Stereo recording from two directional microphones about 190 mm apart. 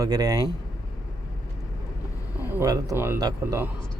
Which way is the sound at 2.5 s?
15° right (ahead or behind).